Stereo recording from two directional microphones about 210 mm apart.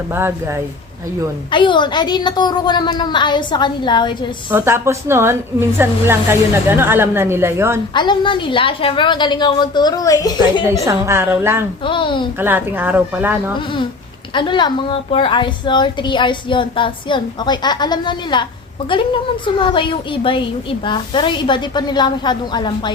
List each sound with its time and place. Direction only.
0.1 s a woman's voice: 10° right (ahead or behind)
1.5 s a woman's voice: 20° left (ahead or behind)
4.5 s a woman's voice: 15° right (ahead or behind)
7.9 s a woman's voice: 20° left (ahead or behind)
10.8 s a woman's voice: 10° right (ahead or behind)
11.9 s a woman's voice: 25° left (ahead or behind)
12.4 s a woman's voice: 10° right (ahead or behind)
14.3 s a woman's voice: 20° left (ahead or behind)
19.5 s a woman's voice: 25° left (ahead or behind)